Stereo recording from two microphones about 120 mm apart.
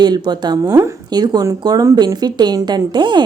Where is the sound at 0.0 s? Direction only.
35° right (ahead or behind).